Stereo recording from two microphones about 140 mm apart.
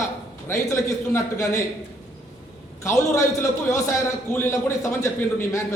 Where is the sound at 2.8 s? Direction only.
20° left (ahead or behind).